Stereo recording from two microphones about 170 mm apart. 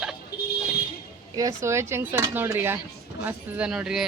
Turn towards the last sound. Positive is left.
turn(degrees=0)  # may be behind; listen again after turning